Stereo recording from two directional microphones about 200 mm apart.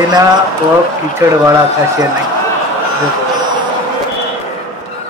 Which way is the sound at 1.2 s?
15° right (ahead or behind).